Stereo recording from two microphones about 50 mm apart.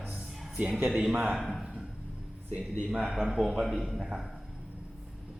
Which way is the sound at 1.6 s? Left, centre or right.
Centre.